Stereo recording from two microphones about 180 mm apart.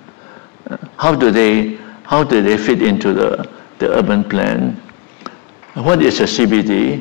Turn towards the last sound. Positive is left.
turn(degrees=10)  # may be behind; listen again after turning